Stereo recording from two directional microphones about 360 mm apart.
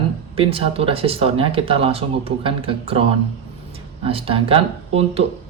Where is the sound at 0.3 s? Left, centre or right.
Centre.